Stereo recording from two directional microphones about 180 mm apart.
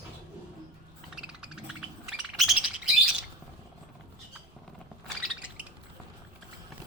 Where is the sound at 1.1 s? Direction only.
5° right (ahead or behind).